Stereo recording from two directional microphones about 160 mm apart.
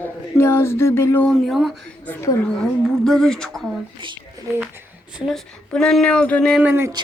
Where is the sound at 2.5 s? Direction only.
Centre (ahead or behind).